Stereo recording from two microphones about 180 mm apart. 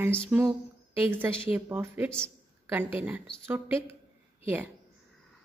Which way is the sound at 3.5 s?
10° right (ahead or behind).